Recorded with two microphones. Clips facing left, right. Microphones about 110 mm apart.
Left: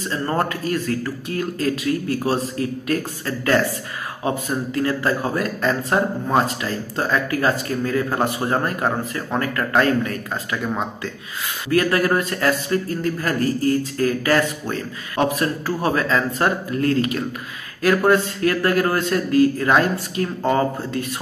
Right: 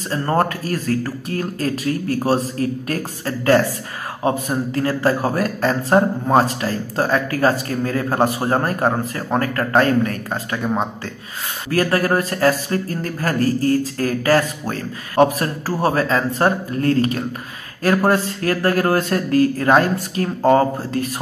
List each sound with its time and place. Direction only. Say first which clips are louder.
0.1 s speech: right 4 dB; 35° right (ahead or behind)